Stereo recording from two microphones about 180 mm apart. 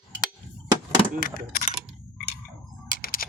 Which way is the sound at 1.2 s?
50° left (ahead or behind).